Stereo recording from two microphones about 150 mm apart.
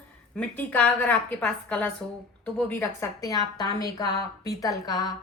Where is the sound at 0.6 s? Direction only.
10° left (ahead or behind).